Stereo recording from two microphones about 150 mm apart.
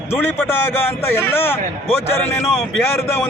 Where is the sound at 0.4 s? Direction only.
15° left (ahead or behind).